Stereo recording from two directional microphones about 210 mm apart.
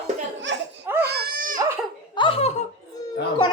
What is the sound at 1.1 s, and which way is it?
Baby cry, 45° right (ahead or behind).